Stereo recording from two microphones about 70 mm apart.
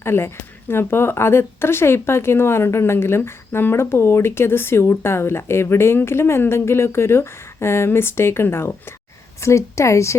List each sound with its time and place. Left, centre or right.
0.0 s speech: left